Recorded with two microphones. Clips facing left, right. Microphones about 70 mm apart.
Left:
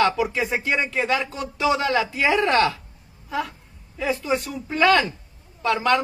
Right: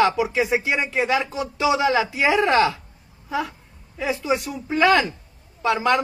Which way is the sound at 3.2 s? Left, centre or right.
Centre.